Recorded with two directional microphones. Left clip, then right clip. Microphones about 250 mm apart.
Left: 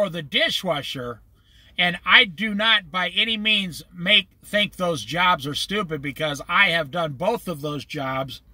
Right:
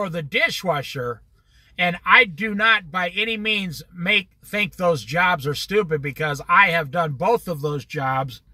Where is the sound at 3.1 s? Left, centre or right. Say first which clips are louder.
Left 5 dB; right.